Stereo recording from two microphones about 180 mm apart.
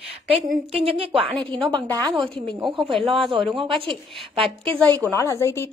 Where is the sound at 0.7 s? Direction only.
30° right (ahead or behind).